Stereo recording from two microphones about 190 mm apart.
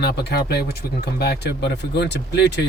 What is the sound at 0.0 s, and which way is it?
Speech, 60° left (ahead or behind).